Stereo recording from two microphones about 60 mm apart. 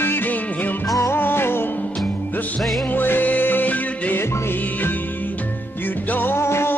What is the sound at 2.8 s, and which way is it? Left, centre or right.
Music, left.